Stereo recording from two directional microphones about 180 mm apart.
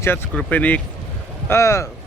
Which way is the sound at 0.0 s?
10° left (ahead or behind).